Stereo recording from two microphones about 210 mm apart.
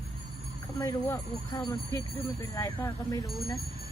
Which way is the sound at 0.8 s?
15° left (ahead or behind).